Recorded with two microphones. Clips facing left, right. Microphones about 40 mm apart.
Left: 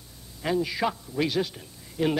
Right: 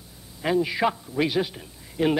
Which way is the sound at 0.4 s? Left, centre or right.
Centre.